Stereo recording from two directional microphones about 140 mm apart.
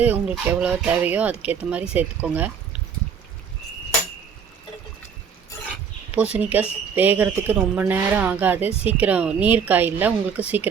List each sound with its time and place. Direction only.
0.0 s speech: 10° right (ahead or behind)
6.1 s speech: 10° right (ahead or behind)